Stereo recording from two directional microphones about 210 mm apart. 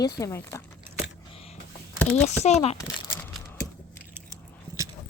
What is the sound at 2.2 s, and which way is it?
Speech, 30° left (ahead or behind).